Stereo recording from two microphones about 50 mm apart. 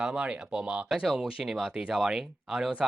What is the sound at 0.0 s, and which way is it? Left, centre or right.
Speech, right.